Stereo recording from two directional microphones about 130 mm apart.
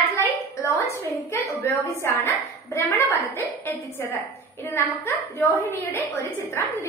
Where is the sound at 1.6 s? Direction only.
20° left (ahead or behind).